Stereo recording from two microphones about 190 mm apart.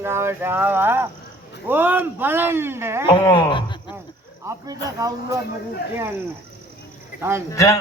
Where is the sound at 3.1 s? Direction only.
25° left (ahead or behind).